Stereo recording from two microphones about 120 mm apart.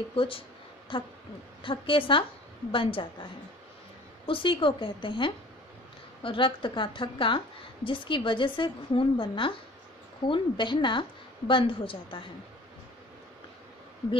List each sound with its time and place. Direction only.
0.1 s a woman's voice: 50° left (ahead or behind)
4.3 s a woman's voice: 45° left (ahead or behind)